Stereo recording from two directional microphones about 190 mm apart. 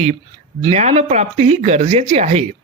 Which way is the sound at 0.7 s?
35° right (ahead or behind).